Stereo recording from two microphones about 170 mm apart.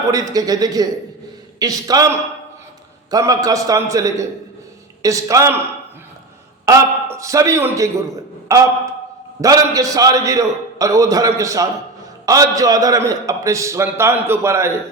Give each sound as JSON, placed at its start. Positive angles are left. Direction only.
{"t": 0.1, "sound": "a man's voice", "side_deg": -20}
{"t": 6.7, "sound": "a man's voice", "side_deg": -20}